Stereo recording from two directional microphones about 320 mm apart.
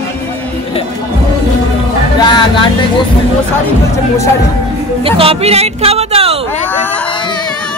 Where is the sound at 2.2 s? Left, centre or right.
Centre.